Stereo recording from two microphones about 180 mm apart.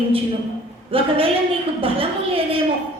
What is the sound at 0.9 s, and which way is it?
A woman's voice, 30° right (ahead or behind).